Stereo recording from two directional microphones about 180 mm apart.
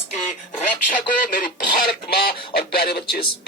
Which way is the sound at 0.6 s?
50° left (ahead or behind).